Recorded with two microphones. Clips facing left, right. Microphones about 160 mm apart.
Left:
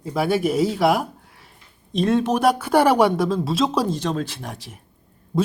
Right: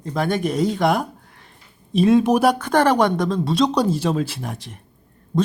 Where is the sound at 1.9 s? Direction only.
5° right (ahead or behind).